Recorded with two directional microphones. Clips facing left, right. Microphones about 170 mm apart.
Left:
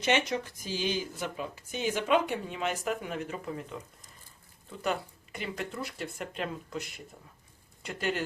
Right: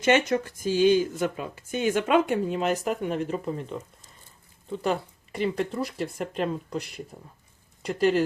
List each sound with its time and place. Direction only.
0.0 s speech: 50° right (ahead or behind)